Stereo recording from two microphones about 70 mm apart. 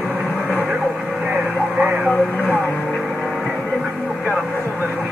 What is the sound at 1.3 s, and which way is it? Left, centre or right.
Vehicle, right.